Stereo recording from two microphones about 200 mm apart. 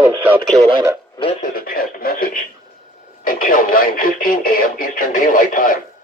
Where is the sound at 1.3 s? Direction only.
45° left (ahead or behind).